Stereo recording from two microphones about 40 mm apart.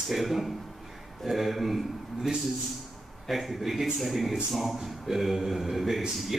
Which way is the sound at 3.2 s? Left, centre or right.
Centre.